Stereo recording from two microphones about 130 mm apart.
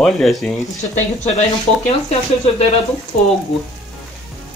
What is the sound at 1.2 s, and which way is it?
Speech, 60° left (ahead or behind).